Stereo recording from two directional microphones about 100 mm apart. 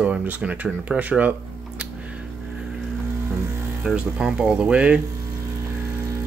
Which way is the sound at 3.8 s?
10° right (ahead or behind).